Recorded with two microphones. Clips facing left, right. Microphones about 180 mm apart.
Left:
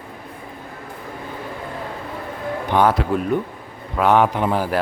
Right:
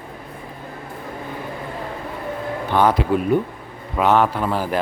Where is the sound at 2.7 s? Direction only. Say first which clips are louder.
Even; 15° left (ahead or behind).